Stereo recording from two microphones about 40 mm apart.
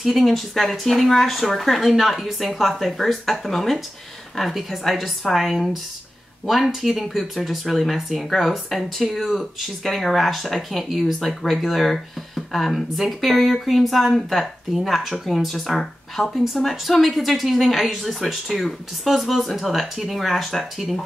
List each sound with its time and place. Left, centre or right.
0.2 s speech: centre